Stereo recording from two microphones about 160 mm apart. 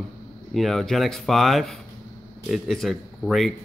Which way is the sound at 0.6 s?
Centre (ahead or behind).